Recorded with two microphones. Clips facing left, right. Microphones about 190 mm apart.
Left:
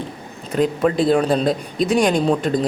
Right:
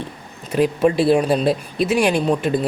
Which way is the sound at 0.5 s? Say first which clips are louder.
Right 1 dB; 10° right (ahead or behind).